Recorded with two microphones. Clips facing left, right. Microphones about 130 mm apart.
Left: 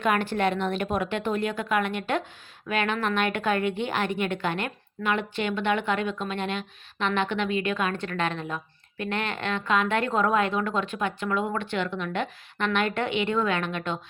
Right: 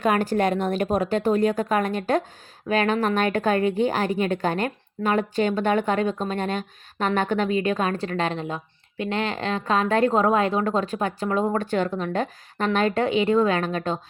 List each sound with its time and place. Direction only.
0.0 s a woman's voice: 40° right (ahead or behind)